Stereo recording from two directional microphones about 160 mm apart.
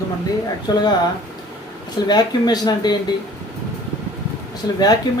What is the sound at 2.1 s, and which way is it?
Speech, 25° left (ahead or behind).